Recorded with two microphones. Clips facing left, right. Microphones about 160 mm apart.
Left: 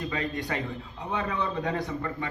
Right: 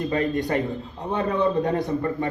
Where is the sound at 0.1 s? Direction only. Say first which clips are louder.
Right 8 dB; 50° right (ahead or behind).